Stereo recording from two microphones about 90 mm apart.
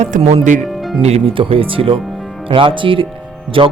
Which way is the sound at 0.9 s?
85° right.